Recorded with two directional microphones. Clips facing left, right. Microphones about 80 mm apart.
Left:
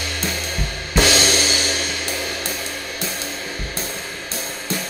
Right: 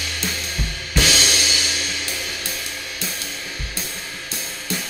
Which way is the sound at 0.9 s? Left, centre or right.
Left.